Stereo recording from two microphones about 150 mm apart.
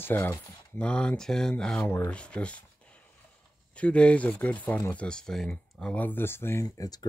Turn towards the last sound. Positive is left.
turn(degrees=25)  # may be behind; listen again after turning